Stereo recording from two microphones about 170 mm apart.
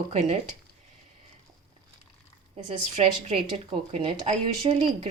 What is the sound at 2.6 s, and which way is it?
Speech, 35° right (ahead or behind).